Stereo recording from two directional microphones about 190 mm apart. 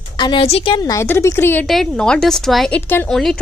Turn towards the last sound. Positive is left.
turn(degrees=5)  # may be behind; listen again after turning